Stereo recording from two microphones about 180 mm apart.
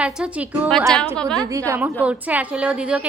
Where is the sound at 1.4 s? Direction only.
15° right (ahead or behind).